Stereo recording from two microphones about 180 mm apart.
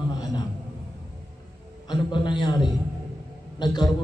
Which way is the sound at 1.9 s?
25° left (ahead or behind).